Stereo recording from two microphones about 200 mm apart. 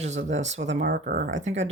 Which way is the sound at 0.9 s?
50° right (ahead or behind).